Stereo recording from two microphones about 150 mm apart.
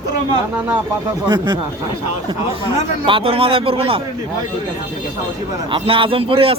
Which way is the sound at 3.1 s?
35° right (ahead or behind).